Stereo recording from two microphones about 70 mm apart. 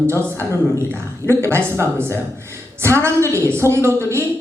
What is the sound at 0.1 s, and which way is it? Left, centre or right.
A woman's voice, right.